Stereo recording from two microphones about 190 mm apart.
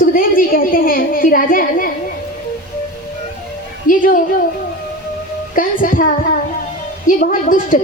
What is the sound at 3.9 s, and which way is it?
Speech, 45° left (ahead or behind).